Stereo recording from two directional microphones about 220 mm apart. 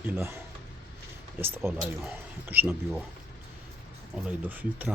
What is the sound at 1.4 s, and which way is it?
Speech, 10° right (ahead or behind).